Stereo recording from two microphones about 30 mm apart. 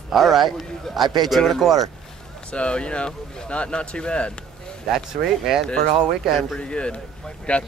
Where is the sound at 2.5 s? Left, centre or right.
Left.